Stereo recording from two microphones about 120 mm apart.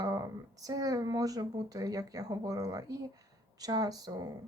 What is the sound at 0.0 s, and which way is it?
Speech, 30° right (ahead or behind).